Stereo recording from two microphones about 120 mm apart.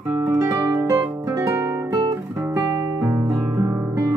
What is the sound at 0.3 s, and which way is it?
Music, 30° right (ahead or behind).